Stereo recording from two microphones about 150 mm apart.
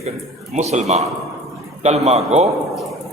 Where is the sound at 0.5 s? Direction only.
50° right (ahead or behind).